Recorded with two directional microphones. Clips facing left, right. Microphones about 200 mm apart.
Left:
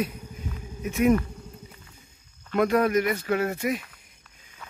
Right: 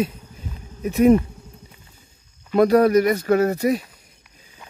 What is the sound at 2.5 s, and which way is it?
Speech, 35° right (ahead or behind).